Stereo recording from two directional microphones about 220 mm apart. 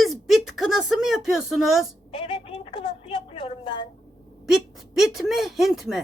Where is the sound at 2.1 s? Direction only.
25° left (ahead or behind).